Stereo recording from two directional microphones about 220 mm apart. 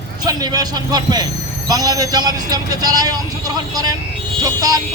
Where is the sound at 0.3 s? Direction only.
15° right (ahead or behind).